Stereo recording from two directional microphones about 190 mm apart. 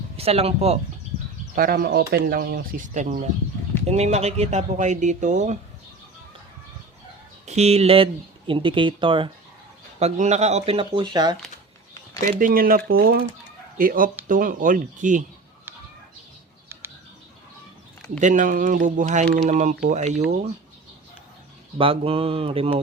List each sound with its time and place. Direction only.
0.2 s speech: 30° right (ahead or behind)
1.5 s speech: 55° right (ahead or behind)
7.4 s speech: 35° right (ahead or behind)
12.3 s speech: 45° right (ahead or behind)
18.2 s speech: 40° right (ahead or behind)
21.8 s speech: 30° right (ahead or behind)